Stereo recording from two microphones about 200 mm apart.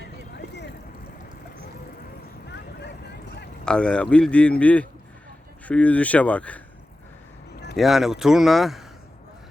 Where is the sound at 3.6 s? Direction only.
5° left (ahead or behind).